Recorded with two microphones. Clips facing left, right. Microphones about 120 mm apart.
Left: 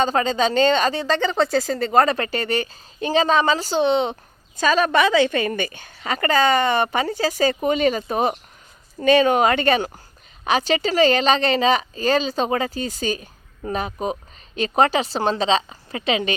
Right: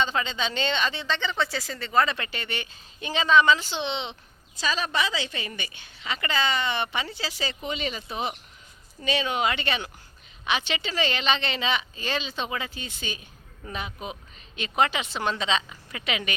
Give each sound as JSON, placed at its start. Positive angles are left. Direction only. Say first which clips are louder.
{"t": 0.0, "sound": "a woman's voice", "louder": "left 8 dB", "side_deg": 45}